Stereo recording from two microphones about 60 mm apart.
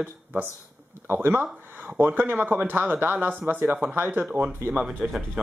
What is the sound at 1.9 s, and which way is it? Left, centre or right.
Speech, right.